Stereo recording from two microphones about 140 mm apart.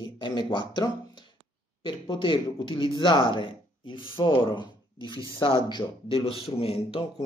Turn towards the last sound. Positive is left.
turn(degrees=45)  # may be behind; listen again after turning